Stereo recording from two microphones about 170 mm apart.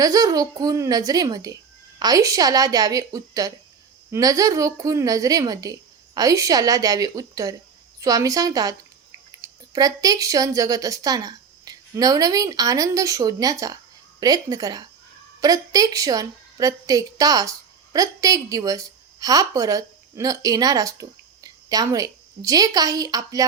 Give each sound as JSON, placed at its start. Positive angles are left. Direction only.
{"t": 0.0, "sound": "a woman's voice", "side_deg": -20}